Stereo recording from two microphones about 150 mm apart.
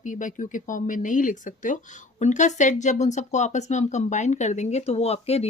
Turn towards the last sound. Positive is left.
turn(degrees=40)  # may be behind; listen again after turning